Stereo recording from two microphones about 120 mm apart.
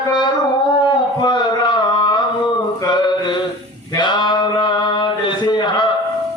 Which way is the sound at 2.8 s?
40° left (ahead or behind).